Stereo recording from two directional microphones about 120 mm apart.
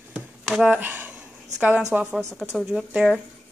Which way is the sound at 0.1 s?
5° right (ahead or behind).